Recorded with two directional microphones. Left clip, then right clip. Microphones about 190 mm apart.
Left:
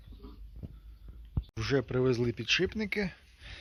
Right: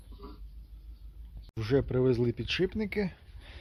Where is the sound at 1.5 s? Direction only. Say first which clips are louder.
Right 2 dB; 5° right (ahead or behind).